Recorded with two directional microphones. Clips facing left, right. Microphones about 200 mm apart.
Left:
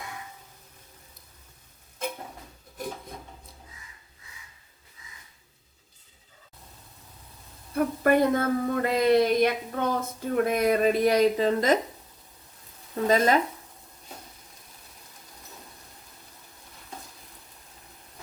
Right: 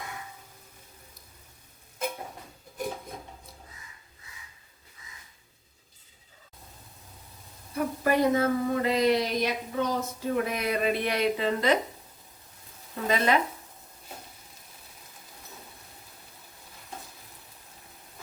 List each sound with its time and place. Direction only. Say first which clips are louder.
7.8 s speech: left 3 dB; 55° left (ahead or behind)
13.1 s speech: left 3 dB; 40° left (ahead or behind)